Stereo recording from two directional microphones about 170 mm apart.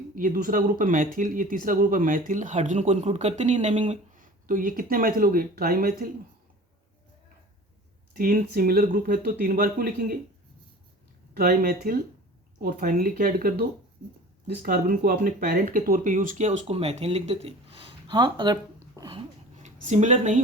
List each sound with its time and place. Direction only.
0.2 s speech: 55° right (ahead or behind)
8.1 s speech: 55° right (ahead or behind)
11.3 s speech: 60° right (ahead or behind); by 19.2 s 25° right (ahead or behind)
19.6 s speech: 45° right (ahead or behind)